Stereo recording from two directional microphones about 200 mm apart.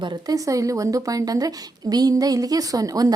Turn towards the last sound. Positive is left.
turn(degrees=-20)  # may be behind; listen again after turning